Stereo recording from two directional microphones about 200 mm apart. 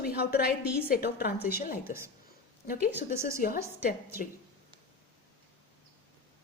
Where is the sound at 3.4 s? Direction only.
45° left (ahead or behind).